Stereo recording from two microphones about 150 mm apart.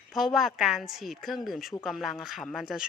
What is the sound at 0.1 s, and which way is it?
Speech, centre (ahead or behind).